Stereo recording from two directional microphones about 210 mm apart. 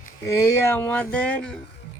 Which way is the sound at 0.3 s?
15° left (ahead or behind).